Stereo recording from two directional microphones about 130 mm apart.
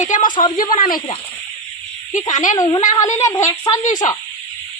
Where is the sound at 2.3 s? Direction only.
75° left (ahead or behind).